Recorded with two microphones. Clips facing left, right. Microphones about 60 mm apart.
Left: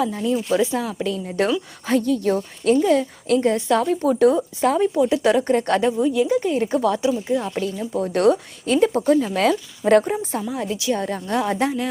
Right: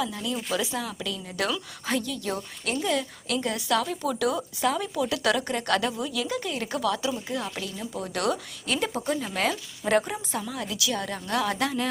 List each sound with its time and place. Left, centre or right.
0.0 s a woman's voice: left
7.5 s a woman's voice: left